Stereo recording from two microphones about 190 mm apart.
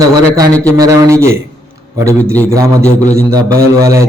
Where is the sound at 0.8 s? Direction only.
15° right (ahead or behind).